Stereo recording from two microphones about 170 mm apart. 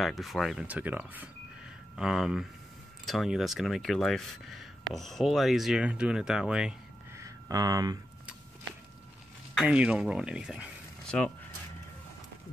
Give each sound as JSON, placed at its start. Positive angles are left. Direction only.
{"t": 0.0, "sound": "speech", "side_deg": 0}
{"t": 7.2, "sound": "a sound", "side_deg": -20}
{"t": 9.6, "sound": "speech", "side_deg": -5}